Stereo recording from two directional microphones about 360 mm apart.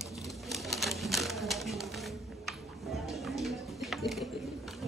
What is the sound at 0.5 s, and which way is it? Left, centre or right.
Typewriter, centre.